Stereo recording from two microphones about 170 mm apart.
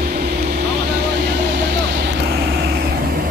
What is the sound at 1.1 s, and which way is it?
Vehicle, 85° right.